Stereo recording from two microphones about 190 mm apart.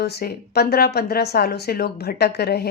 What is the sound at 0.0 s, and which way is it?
Speech, 60° left (ahead or behind).